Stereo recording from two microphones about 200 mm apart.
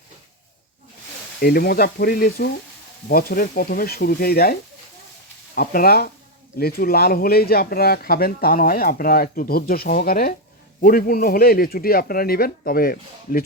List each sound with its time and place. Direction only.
1.4 s speech: 50° left (ahead or behind)
5.5 s speech: 45° left (ahead or behind)